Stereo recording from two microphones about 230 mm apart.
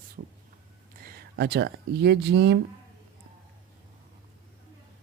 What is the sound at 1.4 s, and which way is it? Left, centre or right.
Speech, right.